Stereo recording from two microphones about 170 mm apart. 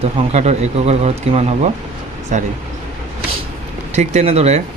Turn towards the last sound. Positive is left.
turn(degrees=-40)  # may be behind; listen again after turning